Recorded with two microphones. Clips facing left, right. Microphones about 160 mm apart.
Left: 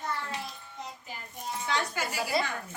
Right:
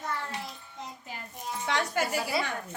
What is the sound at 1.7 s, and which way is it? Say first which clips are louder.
Speech: right 3 dB; 80° right.